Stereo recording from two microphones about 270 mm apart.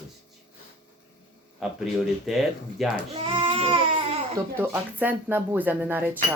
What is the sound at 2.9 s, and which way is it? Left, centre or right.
Speech, right.